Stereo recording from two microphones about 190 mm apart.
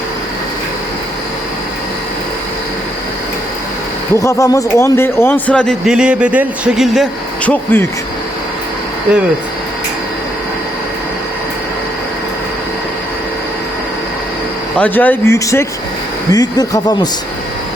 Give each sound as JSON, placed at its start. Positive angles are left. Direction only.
{"t": 4.1, "sound": "a man's voice", "side_deg": 15}
{"t": 14.8, "sound": "a man's voice", "side_deg": 10}